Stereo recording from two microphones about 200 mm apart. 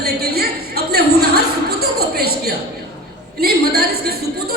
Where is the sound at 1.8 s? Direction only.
50° right (ahead or behind).